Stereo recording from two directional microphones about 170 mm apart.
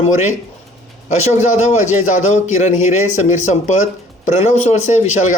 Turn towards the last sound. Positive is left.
turn(degrees=45)  # may be behind; listen again after turning